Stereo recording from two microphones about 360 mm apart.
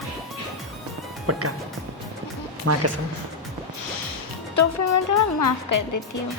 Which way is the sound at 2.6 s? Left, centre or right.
Right.